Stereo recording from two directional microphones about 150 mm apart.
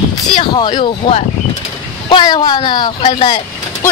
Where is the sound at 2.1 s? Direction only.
25° left (ahead or behind).